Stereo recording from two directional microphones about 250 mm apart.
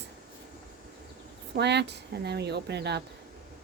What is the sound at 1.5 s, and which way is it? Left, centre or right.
Speech, right.